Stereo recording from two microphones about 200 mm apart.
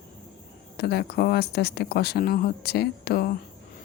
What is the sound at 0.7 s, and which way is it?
Speech, 55° left (ahead or behind).